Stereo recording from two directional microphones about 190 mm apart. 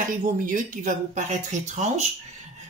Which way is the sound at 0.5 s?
45° right (ahead or behind).